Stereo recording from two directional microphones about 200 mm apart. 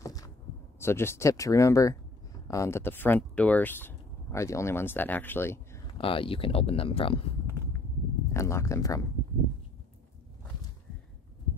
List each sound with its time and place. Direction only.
0.0 s a sound: 15° left (ahead or behind)
0.7 s speech: 10° left (ahead or behind)
5.9 s speech: 25° left (ahead or behind)
8.3 s speech: 15° left (ahead or behind)